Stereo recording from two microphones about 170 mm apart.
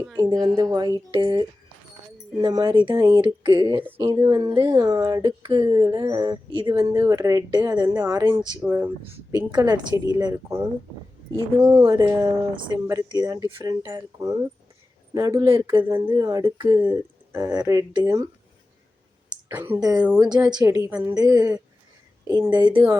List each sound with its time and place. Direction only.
0.4 s speech: 20° right (ahead or behind)
8.6 s speech: 10° right (ahead or behind)
9.3 s speech: 25° right (ahead or behind)
11.6 s speech: 20° right (ahead or behind)
15.4 s speech: 30° right (ahead or behind)
15.8 s speech: 15° right (ahead or behind)
19.5 s speech: 10° right (ahead or behind)